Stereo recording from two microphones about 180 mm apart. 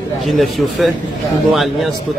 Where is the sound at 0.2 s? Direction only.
Centre (ahead or behind).